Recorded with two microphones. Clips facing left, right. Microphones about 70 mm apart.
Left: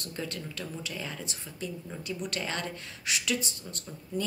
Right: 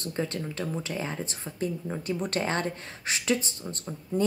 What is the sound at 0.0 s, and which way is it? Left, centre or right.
Speech, right.